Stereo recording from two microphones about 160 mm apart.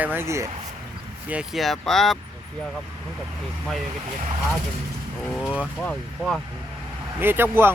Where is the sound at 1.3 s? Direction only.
5° right (ahead or behind).